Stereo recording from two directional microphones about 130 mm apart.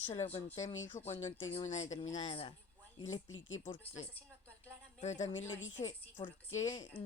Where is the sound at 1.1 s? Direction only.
50° left (ahead or behind).